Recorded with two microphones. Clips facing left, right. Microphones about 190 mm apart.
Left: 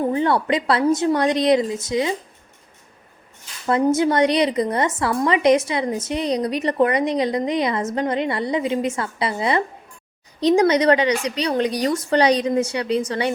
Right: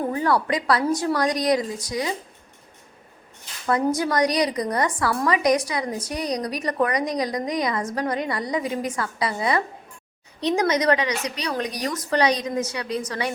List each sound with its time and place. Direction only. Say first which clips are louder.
0.1 s a woman's voice: left 3 dB; 25° left (ahead or behind)
3.7 s a woman's voice: left 4 dB; 25° left (ahead or behind)